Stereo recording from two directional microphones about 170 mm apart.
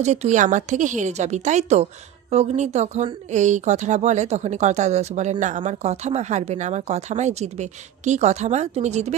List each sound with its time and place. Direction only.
0.0 s speech: 40° right (ahead or behind)